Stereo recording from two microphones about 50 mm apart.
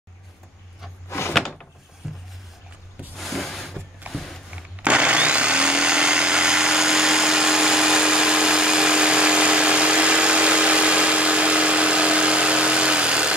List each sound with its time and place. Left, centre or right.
2.0 s music: centre
3.2 s a sound: centre
4.8 s blender: right